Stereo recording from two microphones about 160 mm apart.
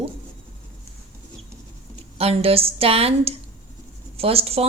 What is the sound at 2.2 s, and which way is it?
A woman's voice, 40° right (ahead or behind).